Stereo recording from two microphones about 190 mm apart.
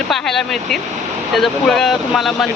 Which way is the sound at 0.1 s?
Centre (ahead or behind).